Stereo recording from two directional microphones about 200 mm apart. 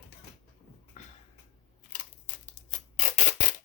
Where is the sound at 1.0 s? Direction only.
40° left (ahead or behind).